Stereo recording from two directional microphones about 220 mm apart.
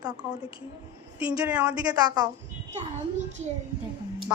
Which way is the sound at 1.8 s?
15° right (ahead or behind).